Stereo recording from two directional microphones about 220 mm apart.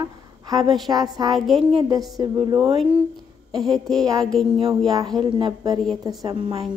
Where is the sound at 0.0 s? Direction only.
20° right (ahead or behind).